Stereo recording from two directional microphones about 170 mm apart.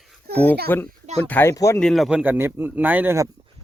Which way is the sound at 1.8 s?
Centre (ahead or behind).